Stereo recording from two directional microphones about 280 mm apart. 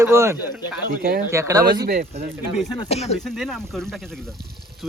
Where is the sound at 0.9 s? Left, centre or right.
Right.